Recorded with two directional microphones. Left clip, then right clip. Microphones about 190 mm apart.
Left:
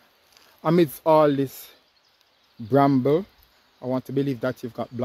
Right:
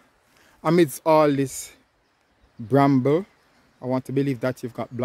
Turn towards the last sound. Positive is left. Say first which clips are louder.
# right 1 dB
turn(degrees=-30)  # may be behind; listen again after turning